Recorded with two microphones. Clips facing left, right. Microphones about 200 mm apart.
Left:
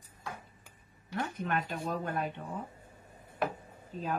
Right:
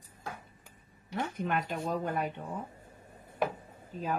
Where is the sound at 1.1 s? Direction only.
15° right (ahead or behind).